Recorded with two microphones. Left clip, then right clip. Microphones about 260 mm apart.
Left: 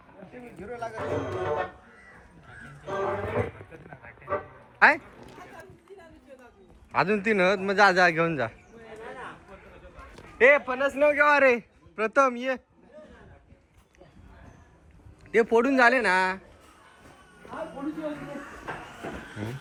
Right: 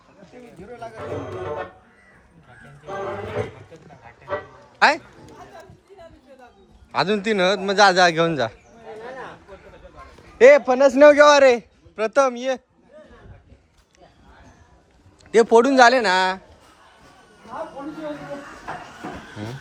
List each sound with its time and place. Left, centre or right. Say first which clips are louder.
0.6 s a sound: left 1 dB; centre
4.8 s speech: right 2 dB; centre
6.9 s a man's voice: right 3 dB; centre
10.3 s speech: right 8 dB; centre
10.7 s speech: right 11 dB; right
11.2 s a man's voice: right 8 dB; centre
15.3 s a man's voice: right 7 dB; centre